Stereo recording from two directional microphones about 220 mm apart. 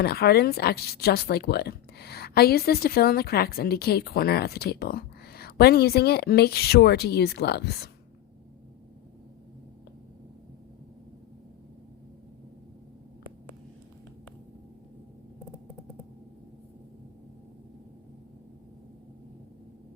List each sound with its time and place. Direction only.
0.0 s a woman's voice: 45° left (ahead or behind)